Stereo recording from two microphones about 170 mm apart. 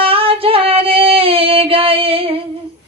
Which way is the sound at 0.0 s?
35° right (ahead or behind).